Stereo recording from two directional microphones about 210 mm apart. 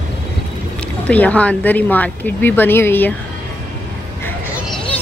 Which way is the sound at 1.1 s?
5° left (ahead or behind).